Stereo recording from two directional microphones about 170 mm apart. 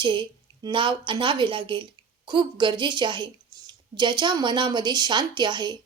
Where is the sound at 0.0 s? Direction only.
30° right (ahead or behind).